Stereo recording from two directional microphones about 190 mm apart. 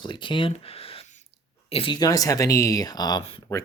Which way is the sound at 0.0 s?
25° left (ahead or behind).